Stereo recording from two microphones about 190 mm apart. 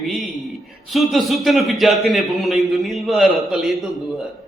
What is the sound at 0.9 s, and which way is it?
A man's voice, centre (ahead or behind).